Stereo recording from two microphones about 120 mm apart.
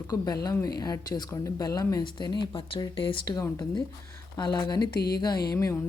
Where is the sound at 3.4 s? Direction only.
30° left (ahead or behind).